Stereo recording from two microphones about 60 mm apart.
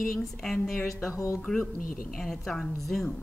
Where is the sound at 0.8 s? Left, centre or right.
Left.